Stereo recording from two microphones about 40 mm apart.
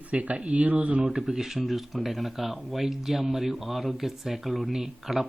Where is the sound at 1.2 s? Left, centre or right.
Centre.